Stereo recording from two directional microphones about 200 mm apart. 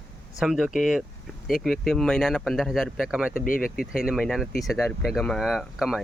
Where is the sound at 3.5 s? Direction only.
45° left (ahead or behind).